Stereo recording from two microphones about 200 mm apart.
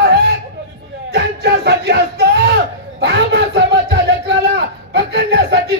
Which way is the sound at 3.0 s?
55° right (ahead or behind).